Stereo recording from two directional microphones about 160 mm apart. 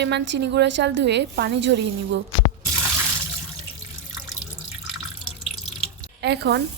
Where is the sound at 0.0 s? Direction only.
90° right.